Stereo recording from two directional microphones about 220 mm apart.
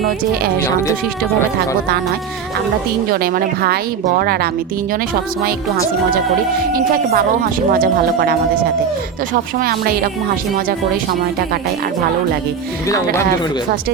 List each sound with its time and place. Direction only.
0.6 s speech: 15° left (ahead or behind)
3.1 s a woman's voice: 40° right (ahead or behind)
7.7 s a woman's voice: 45° right (ahead or behind)
9.6 s a woman's voice: 40° right (ahead or behind)